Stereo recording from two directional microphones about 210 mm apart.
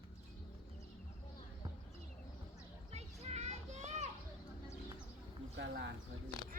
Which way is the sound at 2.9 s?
30° right (ahead or behind).